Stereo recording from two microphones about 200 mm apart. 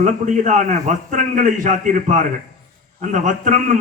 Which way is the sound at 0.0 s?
40° right (ahead or behind).